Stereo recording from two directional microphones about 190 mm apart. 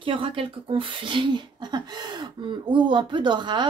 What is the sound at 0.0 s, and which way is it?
Speech, 25° right (ahead or behind).